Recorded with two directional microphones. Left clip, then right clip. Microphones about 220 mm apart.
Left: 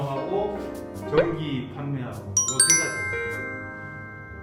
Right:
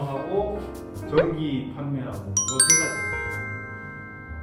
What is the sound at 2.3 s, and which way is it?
Music, centre (ahead or behind).